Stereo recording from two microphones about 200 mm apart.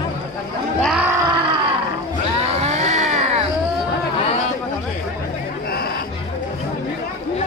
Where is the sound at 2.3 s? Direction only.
30° right (ahead or behind).